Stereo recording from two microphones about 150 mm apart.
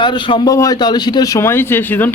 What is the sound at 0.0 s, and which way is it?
Speech, 30° left (ahead or behind).